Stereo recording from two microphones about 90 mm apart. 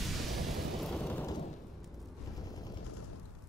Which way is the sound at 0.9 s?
15° left (ahead or behind).